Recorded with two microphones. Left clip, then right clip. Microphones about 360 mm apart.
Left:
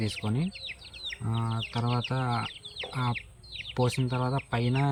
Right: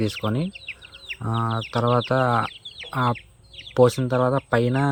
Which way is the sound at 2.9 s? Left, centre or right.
Centre.